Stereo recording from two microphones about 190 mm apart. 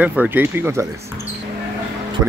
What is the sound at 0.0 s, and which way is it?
A man's voice, 10° right (ahead or behind).